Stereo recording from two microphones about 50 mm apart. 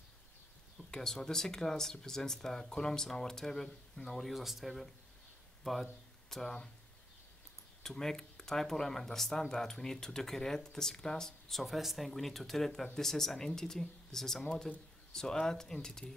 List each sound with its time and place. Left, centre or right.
0.7 s speech: centre
4.2 s speech: centre
7.8 s speech: centre